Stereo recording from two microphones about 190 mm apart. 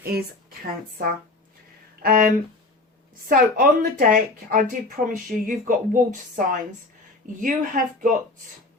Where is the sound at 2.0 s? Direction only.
45° right (ahead or behind).